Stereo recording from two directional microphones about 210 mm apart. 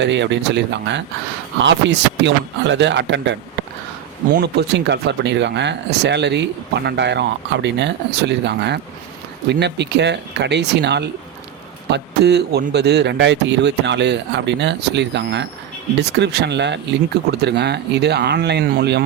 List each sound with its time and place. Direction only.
0.0 s speech: 55° right (ahead or behind)
4.4 s speech: 55° right (ahead or behind)